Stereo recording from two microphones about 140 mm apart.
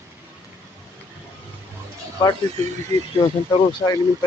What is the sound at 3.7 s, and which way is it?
Speech, 25° left (ahead or behind).